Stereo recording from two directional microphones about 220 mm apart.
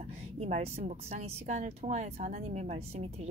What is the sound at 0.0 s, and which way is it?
Speech, 30° right (ahead or behind).